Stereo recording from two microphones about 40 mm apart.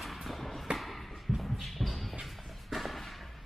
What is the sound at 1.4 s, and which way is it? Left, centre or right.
Music, centre.